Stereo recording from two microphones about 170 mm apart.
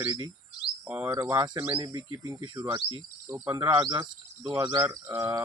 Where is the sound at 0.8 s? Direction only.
10° right (ahead or behind).